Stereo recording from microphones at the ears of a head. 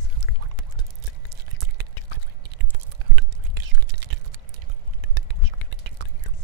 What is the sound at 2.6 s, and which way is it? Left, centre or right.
Whispering, right.